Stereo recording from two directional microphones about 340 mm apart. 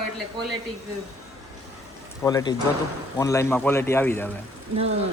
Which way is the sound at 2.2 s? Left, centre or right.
Centre.